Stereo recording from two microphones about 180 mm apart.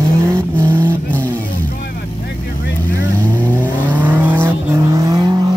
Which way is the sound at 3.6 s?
10° right (ahead or behind).